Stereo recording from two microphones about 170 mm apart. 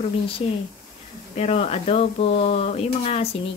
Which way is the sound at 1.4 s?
40° left (ahead or behind).